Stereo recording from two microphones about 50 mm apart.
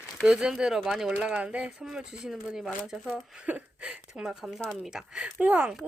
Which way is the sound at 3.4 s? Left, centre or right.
Right.